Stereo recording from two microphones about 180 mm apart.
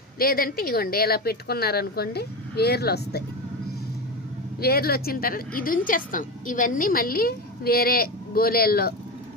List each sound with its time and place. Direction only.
0.2 s a woman's voice: 55° left (ahead or behind)
4.6 s a woman's voice: 60° left (ahead or behind)